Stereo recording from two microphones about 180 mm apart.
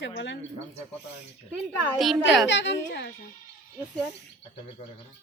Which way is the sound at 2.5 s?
90° left.